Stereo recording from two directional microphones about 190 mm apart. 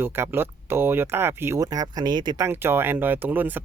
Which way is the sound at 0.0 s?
10° right (ahead or behind).